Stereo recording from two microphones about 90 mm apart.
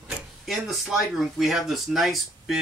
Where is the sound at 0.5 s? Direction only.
Centre (ahead or behind).